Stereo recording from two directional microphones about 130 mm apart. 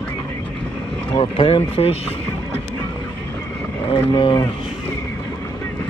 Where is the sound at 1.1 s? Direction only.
45° left (ahead or behind).